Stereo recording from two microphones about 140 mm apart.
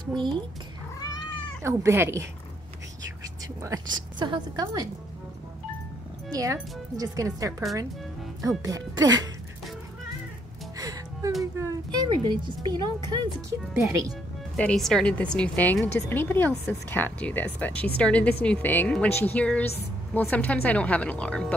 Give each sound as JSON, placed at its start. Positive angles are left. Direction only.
{"t": 0.1, "sound": "speech", "side_deg": -35}
{"t": 1.6, "sound": "speech", "side_deg": -20}
{"t": 3.7, "sound": "speech", "side_deg": -25}
{"t": 6.3, "sound": "speech", "side_deg": -25}
{"t": 10.8, "sound": "music", "side_deg": -25}
{"t": 11.5, "sound": "speech", "side_deg": -25}
{"t": 13.7, "sound": "speech", "side_deg": -20}
{"t": 14.6, "sound": "a woman's voice", "side_deg": 5}